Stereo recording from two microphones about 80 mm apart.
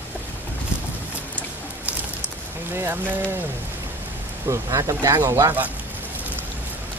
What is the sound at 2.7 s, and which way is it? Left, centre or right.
Speech, right.